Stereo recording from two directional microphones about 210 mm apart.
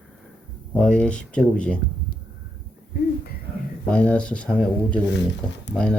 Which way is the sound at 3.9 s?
5° left (ahead or behind).